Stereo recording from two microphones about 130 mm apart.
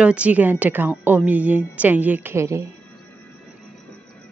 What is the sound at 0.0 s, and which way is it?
A woman's voice, 10° right (ahead or behind).